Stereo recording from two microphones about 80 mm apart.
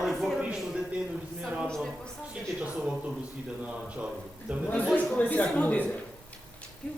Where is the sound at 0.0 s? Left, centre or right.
Centre.